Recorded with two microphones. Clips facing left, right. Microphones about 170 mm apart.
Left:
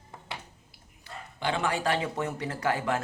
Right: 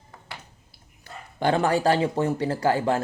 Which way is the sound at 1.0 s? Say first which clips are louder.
Right 7 dB; 45° right (ahead or behind).